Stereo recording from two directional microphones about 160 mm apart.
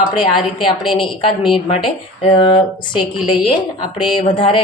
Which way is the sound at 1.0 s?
35° left (ahead or behind).